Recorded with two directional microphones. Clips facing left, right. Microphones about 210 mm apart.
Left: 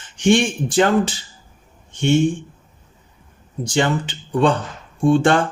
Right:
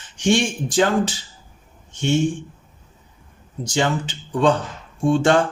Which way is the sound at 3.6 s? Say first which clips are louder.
Left 2 dB; 55° left (ahead or behind).